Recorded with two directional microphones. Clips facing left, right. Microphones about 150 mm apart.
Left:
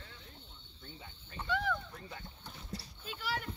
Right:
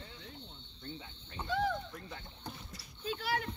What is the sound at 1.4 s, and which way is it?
Music, 35° right (ahead or behind).